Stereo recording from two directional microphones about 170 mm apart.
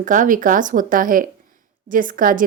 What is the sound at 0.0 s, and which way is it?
A woman's voice, 50° right (ahead or behind).